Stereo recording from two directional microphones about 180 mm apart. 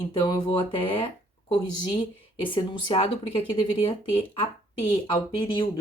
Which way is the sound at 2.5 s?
30° left (ahead or behind).